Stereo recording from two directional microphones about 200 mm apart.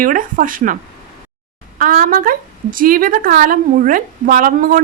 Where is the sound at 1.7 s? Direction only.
40° right (ahead or behind).